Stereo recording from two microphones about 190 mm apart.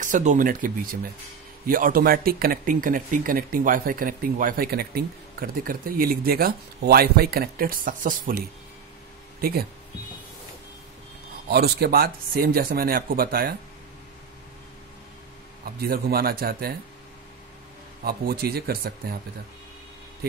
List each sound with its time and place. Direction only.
0.0 s speech: 40° right (ahead or behind)
1.7 s speech: 50° right (ahead or behind)
11.4 s speech: 55° right (ahead or behind)
15.6 s speech: 50° right (ahead or behind)
18.0 s speech: 55° right (ahead or behind)